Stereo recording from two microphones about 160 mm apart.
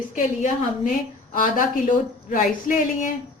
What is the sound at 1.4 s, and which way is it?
Speech, 60° left (ahead or behind).